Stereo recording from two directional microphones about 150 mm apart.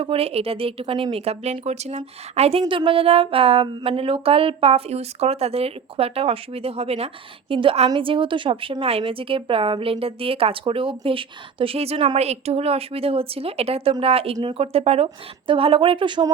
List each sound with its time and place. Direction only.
0.0 s speech: 40° right (ahead or behind)